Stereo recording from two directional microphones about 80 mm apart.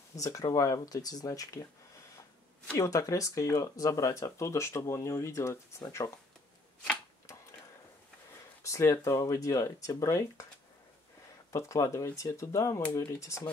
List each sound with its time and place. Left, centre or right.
0.1 s speech: left
2.8 s speech: left
8.6 s speech: left
11.5 s speech: left